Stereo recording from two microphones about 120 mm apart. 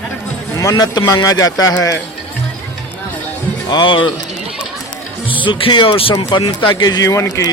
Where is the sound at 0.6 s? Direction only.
30° left (ahead or behind).